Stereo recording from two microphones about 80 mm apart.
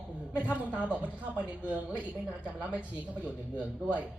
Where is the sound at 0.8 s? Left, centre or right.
Centre.